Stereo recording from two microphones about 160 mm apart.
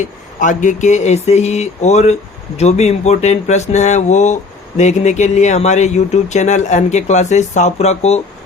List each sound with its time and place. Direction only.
0.0 s speech: 50° left (ahead or behind)